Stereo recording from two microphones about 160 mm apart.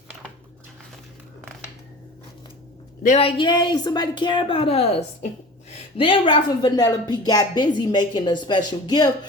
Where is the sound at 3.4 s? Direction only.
25° left (ahead or behind).